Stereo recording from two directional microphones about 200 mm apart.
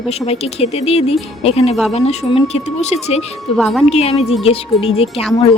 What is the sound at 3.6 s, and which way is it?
Speech, centre (ahead or behind).